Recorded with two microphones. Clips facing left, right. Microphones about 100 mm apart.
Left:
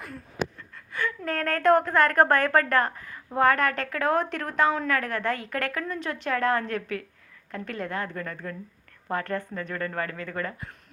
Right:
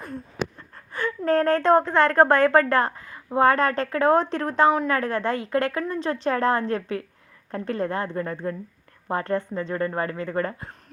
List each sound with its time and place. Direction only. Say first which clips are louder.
0.9 s a woman's voice: right 7 dB; 30° right (ahead or behind)